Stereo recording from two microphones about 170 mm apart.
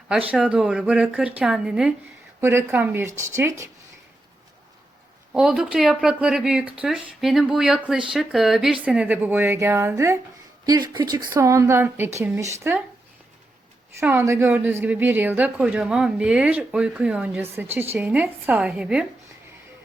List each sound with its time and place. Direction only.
0.1 s a woman's voice: 10° right (ahead or behind)
2.4 s a woman's voice: 15° right (ahead or behind)
5.3 s a woman's voice: 5° right (ahead or behind)
14.0 s a woman's voice: 15° right (ahead or behind)